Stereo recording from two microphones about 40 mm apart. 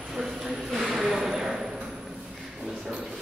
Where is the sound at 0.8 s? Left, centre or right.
Centre.